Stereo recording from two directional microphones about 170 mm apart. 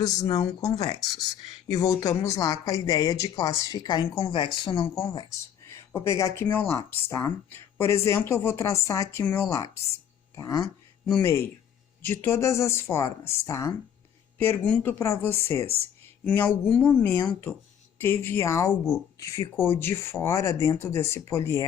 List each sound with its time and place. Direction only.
0.0 s speech: 20° left (ahead or behind)
11.0 s speech: 10° left (ahead or behind)